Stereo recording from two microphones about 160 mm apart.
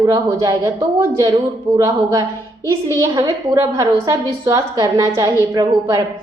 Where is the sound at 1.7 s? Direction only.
20° right (ahead or behind).